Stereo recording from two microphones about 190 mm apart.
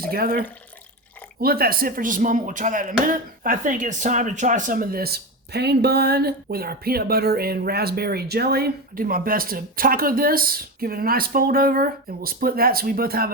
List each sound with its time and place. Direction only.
0.1 s speech: 50° right (ahead or behind)